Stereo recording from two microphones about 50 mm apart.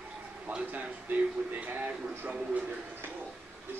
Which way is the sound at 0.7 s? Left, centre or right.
Right.